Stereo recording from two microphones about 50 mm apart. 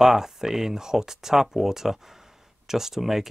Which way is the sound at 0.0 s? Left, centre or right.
Centre.